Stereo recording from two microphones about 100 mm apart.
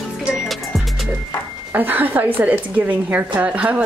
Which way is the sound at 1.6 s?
20° right (ahead or behind).